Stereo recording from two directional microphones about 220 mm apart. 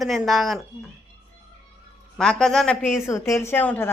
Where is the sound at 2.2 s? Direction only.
5° left (ahead or behind).